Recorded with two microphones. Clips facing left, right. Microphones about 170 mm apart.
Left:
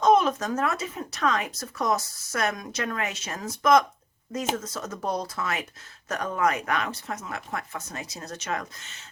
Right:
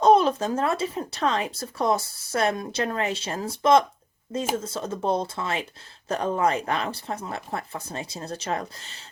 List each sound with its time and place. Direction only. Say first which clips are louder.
0.0 s speech: right 2 dB; 30° right (ahead or behind)